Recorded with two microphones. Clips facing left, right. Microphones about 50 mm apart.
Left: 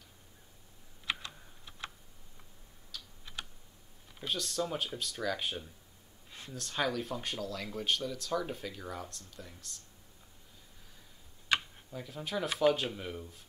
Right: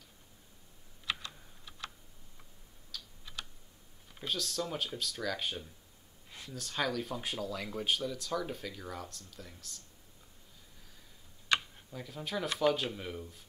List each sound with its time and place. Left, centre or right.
2.9 s typing: centre
4.3 s speech: centre
11.5 s tick-tock: centre
11.9 s speech: centre